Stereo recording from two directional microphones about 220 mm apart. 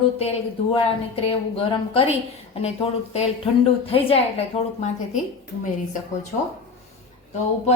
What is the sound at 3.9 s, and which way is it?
Speech, 25° left (ahead or behind).